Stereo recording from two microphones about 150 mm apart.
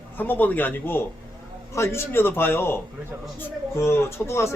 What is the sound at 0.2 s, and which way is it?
A man's voice, 10° left (ahead or behind).